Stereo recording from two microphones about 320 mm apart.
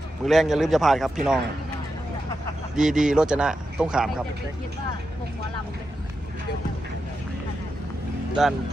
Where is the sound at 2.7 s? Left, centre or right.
Centre.